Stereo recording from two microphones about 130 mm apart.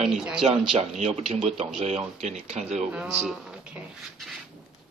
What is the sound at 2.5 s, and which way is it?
Speech, 60° right (ahead or behind).